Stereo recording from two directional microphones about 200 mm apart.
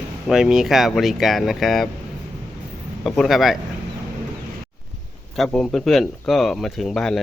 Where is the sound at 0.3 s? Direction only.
Centre (ahead or behind).